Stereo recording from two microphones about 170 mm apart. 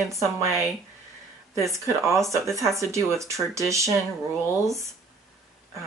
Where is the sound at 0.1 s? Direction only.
15° right (ahead or behind).